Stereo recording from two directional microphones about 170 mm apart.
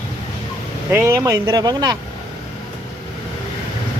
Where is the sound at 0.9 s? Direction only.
15° right (ahead or behind).